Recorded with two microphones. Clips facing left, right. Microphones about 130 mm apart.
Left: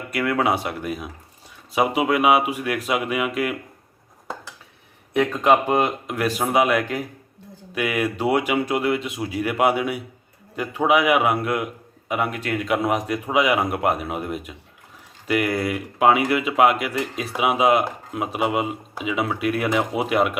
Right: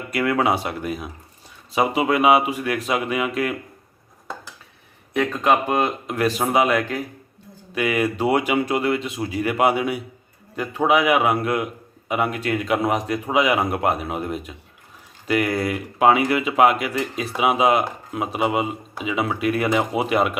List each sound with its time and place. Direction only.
0.1 s speech: centre (ahead or behind)
5.1 s speech: 20° left (ahead or behind)
6.1 s speech: 5° left (ahead or behind)